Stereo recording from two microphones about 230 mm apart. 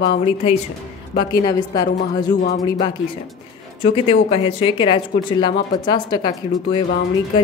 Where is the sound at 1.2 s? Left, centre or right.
Centre.